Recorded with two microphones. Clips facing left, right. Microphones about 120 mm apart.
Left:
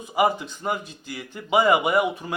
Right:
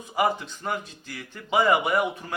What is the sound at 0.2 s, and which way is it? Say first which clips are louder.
Speech: left 3 dB; 15° left (ahead or behind).